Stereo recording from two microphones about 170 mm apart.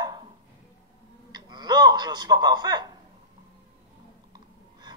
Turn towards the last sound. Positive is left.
turn(degrees=-25)  # may be behind; listen again after turning